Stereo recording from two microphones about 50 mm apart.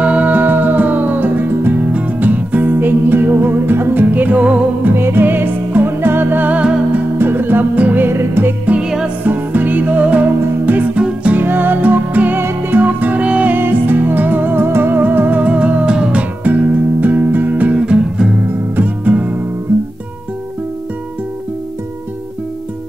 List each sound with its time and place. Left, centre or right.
0.0 s music: right
1.9 s music: right
4.9 s music: right
8.1 s music: right
8.8 s music: centre
9.2 s music: right
11.0 s music: right
11.3 s music: right
13.5 s music: right
15.4 s music: right
17.7 s music: centre
18.4 s music: right